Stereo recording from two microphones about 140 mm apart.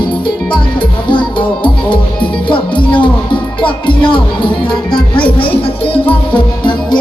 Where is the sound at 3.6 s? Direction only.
35° left (ahead or behind).